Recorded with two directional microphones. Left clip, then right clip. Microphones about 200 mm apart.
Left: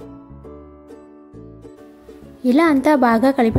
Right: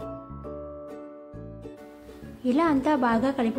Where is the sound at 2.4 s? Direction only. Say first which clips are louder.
Left 8 dB; 40° left (ahead or behind).